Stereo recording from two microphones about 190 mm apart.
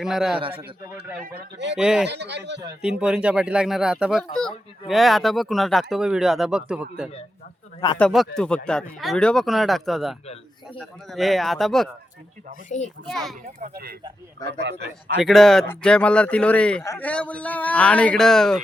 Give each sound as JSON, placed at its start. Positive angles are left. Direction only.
{"t": 0.0, "sound": "speech", "side_deg": 0}
{"t": 1.2, "sound": "a man's voice", "side_deg": -50}
{"t": 1.7, "sound": "speech", "side_deg": -5}
{"t": 2.0, "sound": "speech", "side_deg": -65}
{"t": 3.0, "sound": "speech", "side_deg": -5}
{"t": 12.6, "sound": "a child's voice", "side_deg": 40}
{"t": 13.1, "sound": "speech", "side_deg": 0}
{"t": 13.6, "sound": "a man's voice", "side_deg": -55}
{"t": 15.2, "sound": "speech", "side_deg": 0}